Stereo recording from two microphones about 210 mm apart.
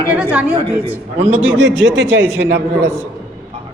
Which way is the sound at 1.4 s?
65° right (ahead or behind).